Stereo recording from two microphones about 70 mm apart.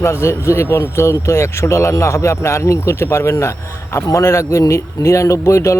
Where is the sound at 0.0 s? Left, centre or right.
Left.